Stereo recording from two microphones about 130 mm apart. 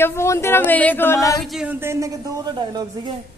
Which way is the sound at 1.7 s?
20° right (ahead or behind).